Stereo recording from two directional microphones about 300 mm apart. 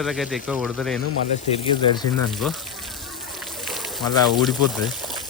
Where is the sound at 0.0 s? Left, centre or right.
Centre.